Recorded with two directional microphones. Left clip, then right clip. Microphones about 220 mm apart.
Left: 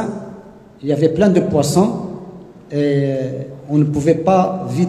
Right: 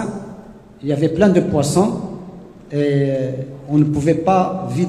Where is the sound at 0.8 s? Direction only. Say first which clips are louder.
Left 1 dB; 50° left (ahead or behind).